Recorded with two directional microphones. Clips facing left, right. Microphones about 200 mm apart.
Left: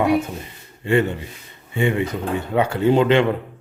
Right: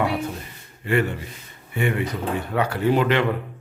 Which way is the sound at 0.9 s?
25° left (ahead or behind).